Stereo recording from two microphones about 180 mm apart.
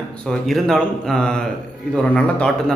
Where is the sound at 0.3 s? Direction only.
5° left (ahead or behind).